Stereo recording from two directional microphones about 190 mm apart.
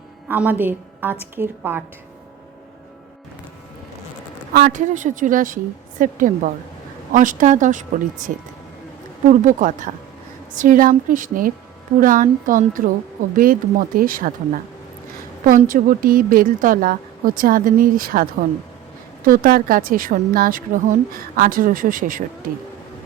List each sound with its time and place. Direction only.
0.3 s a woman's voice: 10° right (ahead or behind)
4.5 s a woman's voice: 45° right (ahead or behind)
9.3 s a woman's voice: 40° right (ahead or behind)